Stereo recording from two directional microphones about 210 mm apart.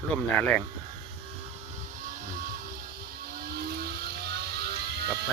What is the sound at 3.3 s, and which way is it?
Vehicle, 45° right (ahead or behind).